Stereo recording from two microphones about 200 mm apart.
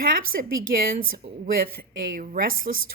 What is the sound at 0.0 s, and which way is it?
Speech, 45° right (ahead or behind).